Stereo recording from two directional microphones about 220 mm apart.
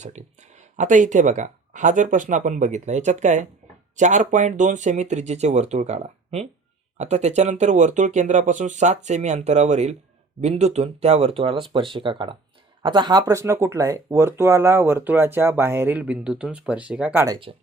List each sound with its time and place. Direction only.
0.0 s speech: 30° right (ahead or behind); by 17.2 s 5° right (ahead or behind)
17.2 s speech: 20° right (ahead or behind)